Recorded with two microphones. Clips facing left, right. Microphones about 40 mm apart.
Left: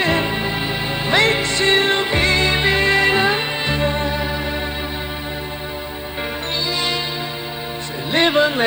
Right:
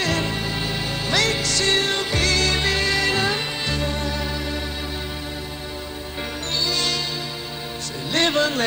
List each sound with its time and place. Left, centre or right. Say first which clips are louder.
0.0 s music: left 5 dB; left
8.1 s music: left 4 dB; centre